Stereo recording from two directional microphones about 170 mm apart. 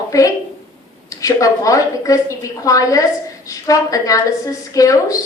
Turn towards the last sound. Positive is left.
turn(degrees=20)  # may be behind; listen again after turning